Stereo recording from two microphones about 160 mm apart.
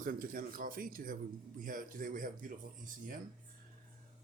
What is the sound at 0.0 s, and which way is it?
Speech, 60° right (ahead or behind).